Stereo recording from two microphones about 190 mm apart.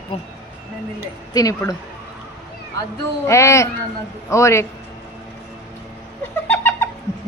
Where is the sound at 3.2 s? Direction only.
15° left (ahead or behind).